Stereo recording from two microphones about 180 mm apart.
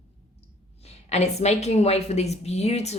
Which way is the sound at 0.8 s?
40° left (ahead or behind).